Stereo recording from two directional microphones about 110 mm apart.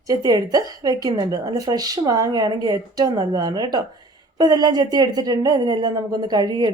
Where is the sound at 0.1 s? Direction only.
35° right (ahead or behind).